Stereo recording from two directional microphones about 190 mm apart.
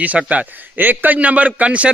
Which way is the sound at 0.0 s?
5° right (ahead or behind).